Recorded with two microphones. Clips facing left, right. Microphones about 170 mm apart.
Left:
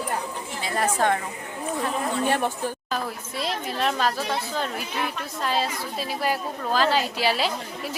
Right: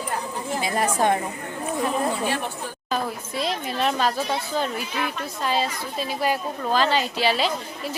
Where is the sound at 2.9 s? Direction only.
Centre (ahead or behind).